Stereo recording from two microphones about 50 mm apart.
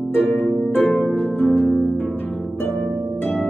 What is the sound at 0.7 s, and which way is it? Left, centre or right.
Harp, left.